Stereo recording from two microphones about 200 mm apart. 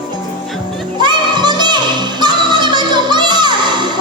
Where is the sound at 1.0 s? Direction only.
20° right (ahead or behind).